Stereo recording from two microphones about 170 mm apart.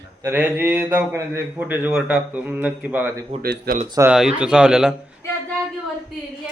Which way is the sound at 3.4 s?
60° right (ahead or behind).